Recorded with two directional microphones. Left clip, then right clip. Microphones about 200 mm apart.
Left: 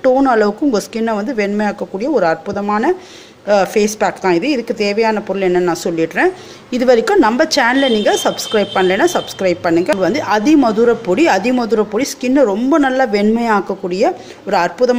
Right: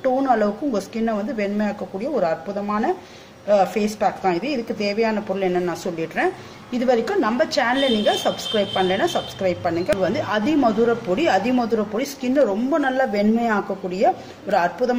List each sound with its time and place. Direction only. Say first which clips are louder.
0.0 s a woman's voice: left 7 dB; 50° left (ahead or behind)